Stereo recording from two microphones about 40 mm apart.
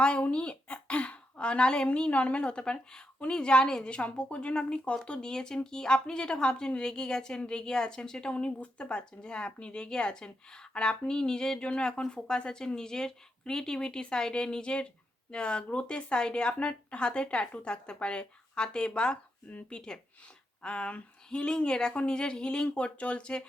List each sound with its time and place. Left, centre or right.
0.0 s speech: left